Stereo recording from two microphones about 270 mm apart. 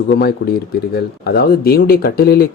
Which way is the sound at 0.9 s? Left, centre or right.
Left.